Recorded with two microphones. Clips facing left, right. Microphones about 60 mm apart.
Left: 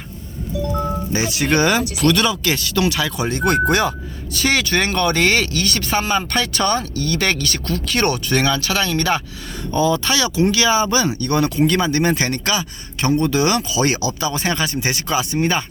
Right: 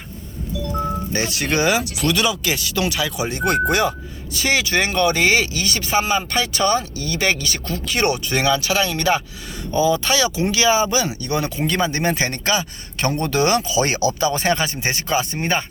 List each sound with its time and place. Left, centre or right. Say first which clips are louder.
1.1 s speech: left 4 dB; centre
10.0 s speech: left 2 dB; right
10.8 s speech: left 3 dB; centre
13.1 s speech: left 2 dB; right